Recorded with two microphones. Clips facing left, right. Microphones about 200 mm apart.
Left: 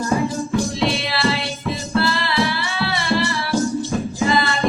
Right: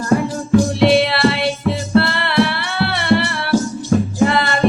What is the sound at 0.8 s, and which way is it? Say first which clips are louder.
Music: right 8 dB; 65° right (ahead or behind).